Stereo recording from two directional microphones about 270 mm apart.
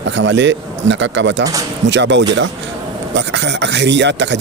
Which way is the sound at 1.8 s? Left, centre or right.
Right.